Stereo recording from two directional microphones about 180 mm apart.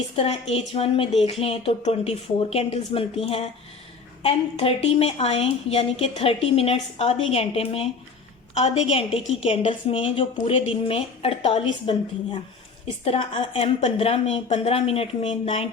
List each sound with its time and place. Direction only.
0.2 s a woman's voice: 35° left (ahead or behind)